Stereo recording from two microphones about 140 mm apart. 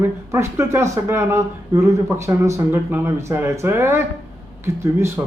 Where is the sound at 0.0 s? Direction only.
20° right (ahead or behind).